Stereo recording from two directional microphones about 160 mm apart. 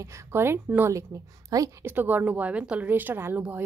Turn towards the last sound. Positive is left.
turn(degrees=-10)  # may be behind; listen again after turning